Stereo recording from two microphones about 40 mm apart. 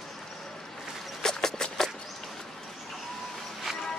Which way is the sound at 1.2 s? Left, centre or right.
Centre.